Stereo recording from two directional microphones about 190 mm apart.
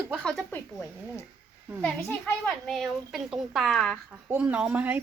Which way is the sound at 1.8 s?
5° left (ahead or behind).